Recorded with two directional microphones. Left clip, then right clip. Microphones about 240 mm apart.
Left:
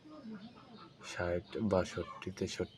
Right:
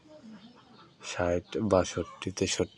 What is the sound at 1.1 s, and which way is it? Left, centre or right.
Speech, right.